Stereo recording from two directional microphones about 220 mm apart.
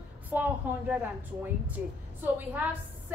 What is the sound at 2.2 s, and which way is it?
Speech, 10° right (ahead or behind).